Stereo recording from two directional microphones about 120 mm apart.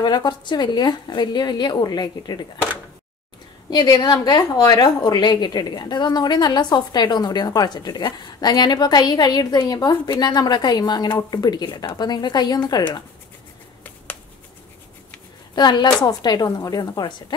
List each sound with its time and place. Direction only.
0.0 s a woman's voice: 40° left (ahead or behind)
3.7 s a woman's voice: 35° left (ahead or behind)
15.5 s a woman's voice: 35° left (ahead or behind)